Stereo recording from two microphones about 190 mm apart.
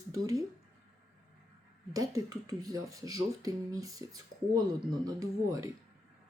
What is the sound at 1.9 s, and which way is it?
Speech, 20° right (ahead or behind).